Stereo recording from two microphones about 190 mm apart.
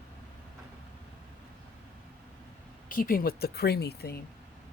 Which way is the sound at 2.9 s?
50° left (ahead or behind).